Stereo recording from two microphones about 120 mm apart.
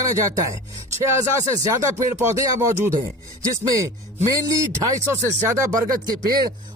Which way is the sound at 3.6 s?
25° right (ahead or behind).